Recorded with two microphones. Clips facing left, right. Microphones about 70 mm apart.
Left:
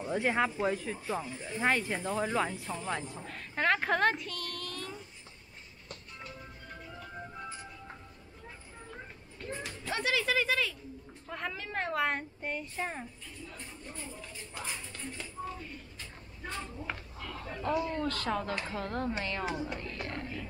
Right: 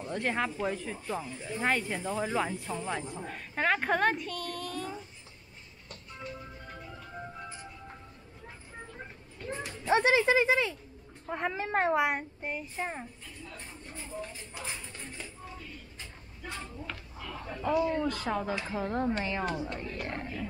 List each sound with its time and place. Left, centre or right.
0.0 s speech: centre
7.0 s music: centre
9.5 s a sound: centre
9.9 s speech: right
12.0 s speech: centre
14.2 s speech: centre
16.0 s a sound: centre
17.5 s speech: centre
19.4 s speech: centre
20.1 s speech: right